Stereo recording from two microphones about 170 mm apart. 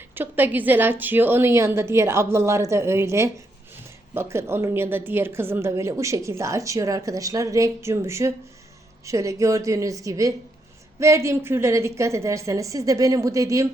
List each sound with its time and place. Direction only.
0.1 s a woman's voice: 10° right (ahead or behind)